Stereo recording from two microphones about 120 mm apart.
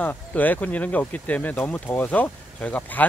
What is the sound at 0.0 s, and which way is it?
Speech, 15° left (ahead or behind).